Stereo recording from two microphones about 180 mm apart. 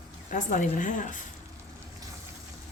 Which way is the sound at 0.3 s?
45° left (ahead or behind).